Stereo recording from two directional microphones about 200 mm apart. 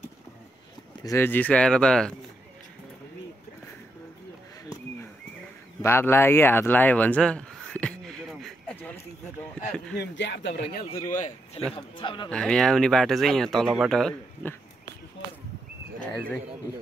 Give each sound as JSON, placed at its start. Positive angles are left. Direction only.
{"t": 1.0, "sound": "speech", "side_deg": 10}
{"t": 5.8, "sound": "a sound", "side_deg": 10}
{"t": 9.9, "sound": "speech", "side_deg": 60}
{"t": 11.1, "sound": "a man's voice", "side_deg": 40}
{"t": 11.7, "sound": "a man's voice", "side_deg": 25}
{"t": 12.3, "sound": "speech", "side_deg": 5}